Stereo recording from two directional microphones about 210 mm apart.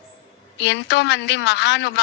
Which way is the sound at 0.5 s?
55° left (ahead or behind).